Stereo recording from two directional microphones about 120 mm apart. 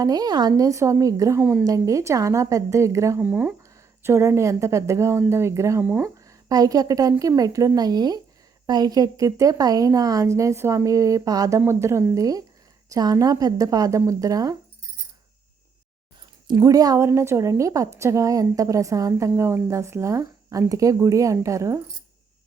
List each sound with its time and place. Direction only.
0.0 s a woman's voice: 30° right (ahead or behind)
1.4 s speech: 15° right (ahead or behind)
1.6 s a woman's voice: 30° right (ahead or behind)
3.2 s a woman's voice: 15° right (ahead or behind)
6.1 s a woman's voice: 30° right (ahead or behind)
16.6 s a woman's voice: 30° right (ahead or behind)